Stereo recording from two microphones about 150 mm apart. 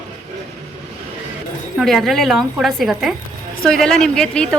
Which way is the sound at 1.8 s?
Centre (ahead or behind).